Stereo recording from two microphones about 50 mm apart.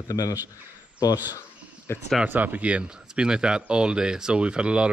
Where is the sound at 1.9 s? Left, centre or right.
Left.